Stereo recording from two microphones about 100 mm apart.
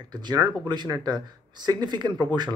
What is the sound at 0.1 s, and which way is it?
Speech, 45° right (ahead or behind).